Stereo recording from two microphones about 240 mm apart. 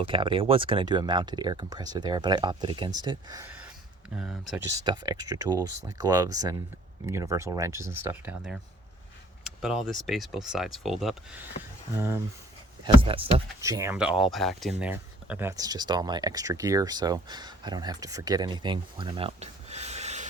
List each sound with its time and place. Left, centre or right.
0.1 s speech: right; by 4.6 s centre
4.7 s speech: centre
12.8 s speech: right